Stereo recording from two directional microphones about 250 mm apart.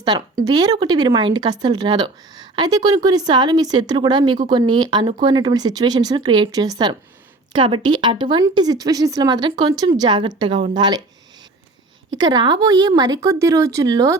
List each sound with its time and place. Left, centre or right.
0.0 s speech: centre
12.1 s speech: centre